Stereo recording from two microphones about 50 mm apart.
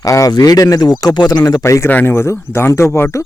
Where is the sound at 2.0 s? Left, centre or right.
Left.